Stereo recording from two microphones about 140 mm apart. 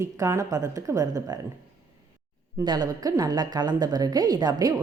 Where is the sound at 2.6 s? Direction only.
30° right (ahead or behind).